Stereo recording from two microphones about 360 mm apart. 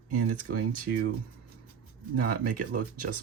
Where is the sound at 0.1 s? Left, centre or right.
Right.